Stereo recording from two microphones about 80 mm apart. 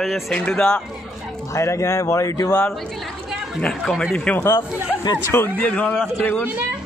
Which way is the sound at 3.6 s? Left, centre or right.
Centre.